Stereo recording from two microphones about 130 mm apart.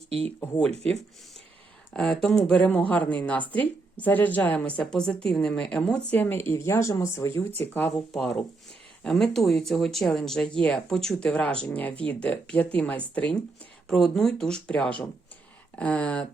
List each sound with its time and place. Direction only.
1.9 s speech: 5° left (ahead or behind)
8.1 s speech: 5° left (ahead or behind)